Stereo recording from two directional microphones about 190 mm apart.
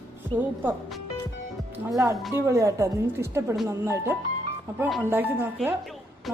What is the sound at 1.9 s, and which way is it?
Speech, 15° right (ahead or behind).